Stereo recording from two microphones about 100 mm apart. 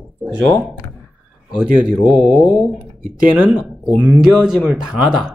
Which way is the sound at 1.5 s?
10° right (ahead or behind).